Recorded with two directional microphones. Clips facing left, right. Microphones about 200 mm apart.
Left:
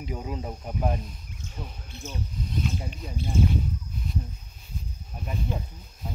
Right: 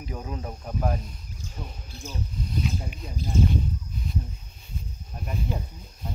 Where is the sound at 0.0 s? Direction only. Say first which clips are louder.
Left 1 dB; 15° left (ahead or behind).